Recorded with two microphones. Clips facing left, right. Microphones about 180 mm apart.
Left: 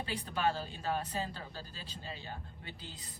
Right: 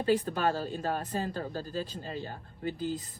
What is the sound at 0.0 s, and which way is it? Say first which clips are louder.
Speech: right 7 dB; 45° right (ahead or behind).